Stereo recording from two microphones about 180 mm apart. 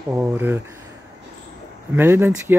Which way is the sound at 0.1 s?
15° right (ahead or behind).